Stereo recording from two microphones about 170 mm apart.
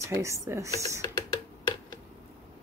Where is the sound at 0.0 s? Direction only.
15° right (ahead or behind).